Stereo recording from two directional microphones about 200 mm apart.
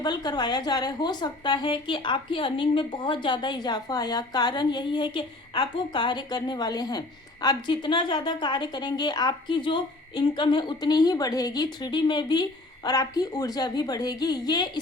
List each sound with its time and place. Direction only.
0.0 s a woman's voice: 20° left (ahead or behind)